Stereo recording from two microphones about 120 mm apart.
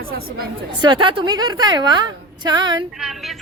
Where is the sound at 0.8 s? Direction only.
45° right (ahead or behind).